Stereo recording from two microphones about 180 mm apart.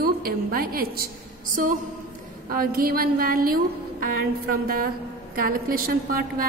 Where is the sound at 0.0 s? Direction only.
55° right (ahead or behind).